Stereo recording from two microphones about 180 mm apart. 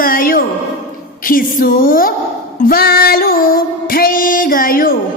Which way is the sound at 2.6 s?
55° left (ahead or behind).